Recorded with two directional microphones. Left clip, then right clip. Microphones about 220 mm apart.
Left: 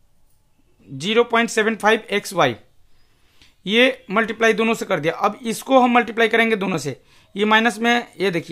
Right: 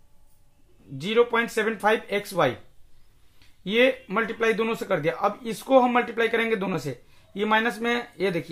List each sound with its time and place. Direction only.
0.9 s speech: 40° left (ahead or behind)